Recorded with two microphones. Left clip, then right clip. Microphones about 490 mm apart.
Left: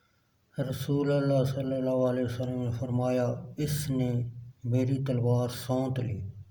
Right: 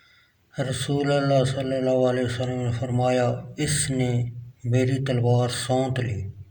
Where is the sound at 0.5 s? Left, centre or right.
Left.